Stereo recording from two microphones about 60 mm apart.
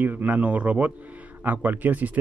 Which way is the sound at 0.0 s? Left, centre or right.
Right.